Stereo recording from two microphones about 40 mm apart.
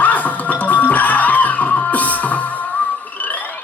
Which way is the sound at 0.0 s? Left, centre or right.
Left.